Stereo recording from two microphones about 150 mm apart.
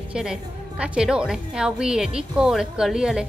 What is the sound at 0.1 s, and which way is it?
Speech, 5° right (ahead or behind).